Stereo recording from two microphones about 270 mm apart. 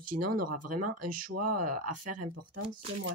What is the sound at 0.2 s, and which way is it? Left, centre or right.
Speech, right.